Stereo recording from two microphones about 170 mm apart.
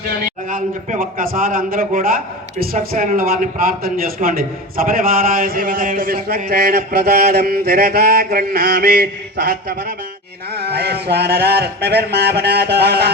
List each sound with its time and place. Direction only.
0.5 s a man's voice: 55° right (ahead or behind); by 9.0 s 75° right (ahead or behind)
9.4 s a man's voice: 60° right (ahead or behind)
10.5 s a sound: 75° right (ahead or behind)